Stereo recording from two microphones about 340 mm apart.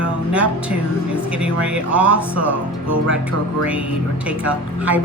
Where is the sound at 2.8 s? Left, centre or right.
Right.